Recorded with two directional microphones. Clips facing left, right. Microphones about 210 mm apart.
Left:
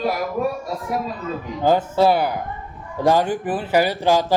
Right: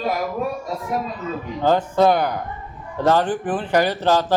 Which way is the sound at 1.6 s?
10° left (ahead or behind).